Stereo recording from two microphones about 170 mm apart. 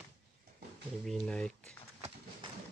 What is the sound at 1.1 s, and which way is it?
Speech, 5° left (ahead or behind).